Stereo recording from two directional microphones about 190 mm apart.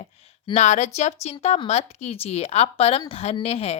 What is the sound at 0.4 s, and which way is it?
A woman's voice, 35° left (ahead or behind).